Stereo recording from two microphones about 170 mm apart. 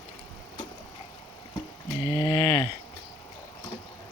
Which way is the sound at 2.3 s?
20° left (ahead or behind).